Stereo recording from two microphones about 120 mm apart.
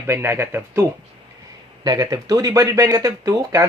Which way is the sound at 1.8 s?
30° right (ahead or behind).